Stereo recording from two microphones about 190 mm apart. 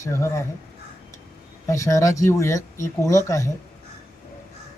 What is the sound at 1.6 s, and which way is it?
Speech, 15° left (ahead or behind).